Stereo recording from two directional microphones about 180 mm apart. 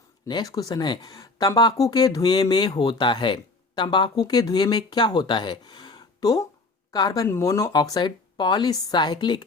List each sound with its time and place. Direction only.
0.3 s speech: 20° left (ahead or behind)